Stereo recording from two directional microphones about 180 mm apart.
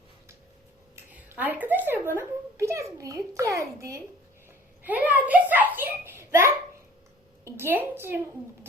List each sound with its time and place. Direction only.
0.9 s a child's voice: 10° right (ahead or behind)